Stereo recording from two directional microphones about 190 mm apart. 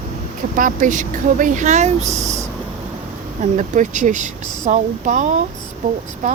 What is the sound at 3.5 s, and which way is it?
Speech, 40° right (ahead or behind).